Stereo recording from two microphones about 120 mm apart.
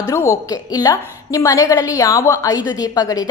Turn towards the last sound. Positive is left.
turn(degrees=30)  # may be behind; listen again after turning